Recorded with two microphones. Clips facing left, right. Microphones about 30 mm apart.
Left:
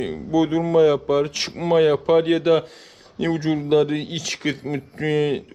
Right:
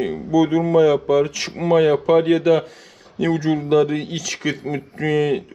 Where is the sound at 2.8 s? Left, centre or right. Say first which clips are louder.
Right 3 dB; right.